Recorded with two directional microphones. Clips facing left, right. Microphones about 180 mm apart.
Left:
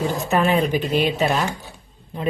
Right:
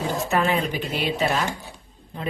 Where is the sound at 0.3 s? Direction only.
20° left (ahead or behind).